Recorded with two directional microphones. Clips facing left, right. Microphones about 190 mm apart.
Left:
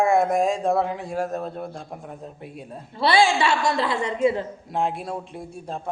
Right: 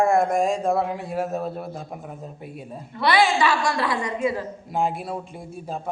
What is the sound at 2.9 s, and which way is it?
A woman's voice, 30° left (ahead or behind).